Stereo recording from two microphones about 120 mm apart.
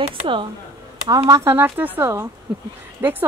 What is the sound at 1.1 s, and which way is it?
Speech, 30° right (ahead or behind).